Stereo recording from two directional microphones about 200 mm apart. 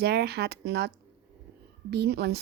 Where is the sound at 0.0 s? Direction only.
55° right (ahead or behind).